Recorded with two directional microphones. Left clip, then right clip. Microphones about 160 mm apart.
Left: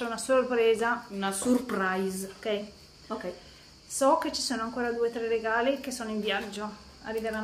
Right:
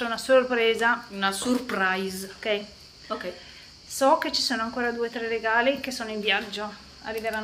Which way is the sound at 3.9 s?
5° right (ahead or behind).